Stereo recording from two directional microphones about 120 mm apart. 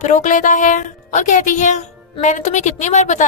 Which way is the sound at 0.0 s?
90° left.